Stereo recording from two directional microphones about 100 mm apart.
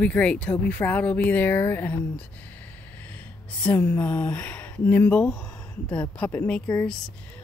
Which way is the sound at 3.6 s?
15° left (ahead or behind).